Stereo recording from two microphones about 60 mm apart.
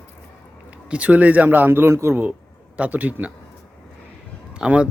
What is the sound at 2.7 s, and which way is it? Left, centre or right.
Speech, right.